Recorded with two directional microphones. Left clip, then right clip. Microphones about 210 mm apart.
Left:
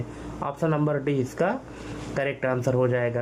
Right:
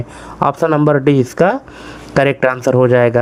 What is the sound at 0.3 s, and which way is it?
Speech, 40° right (ahead or behind).